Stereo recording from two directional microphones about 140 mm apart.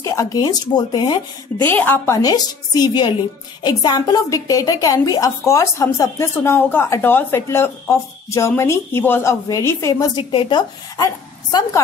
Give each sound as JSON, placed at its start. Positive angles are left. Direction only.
{"t": 0.0, "sound": "a woman's voice", "side_deg": 20}
{"t": 1.6, "sound": "a woman's voice", "side_deg": 15}